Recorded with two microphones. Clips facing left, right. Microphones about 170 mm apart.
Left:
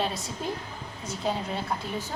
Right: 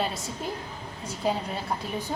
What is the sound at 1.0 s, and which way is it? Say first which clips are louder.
Speech: left 2 dB; 30° right (ahead or behind).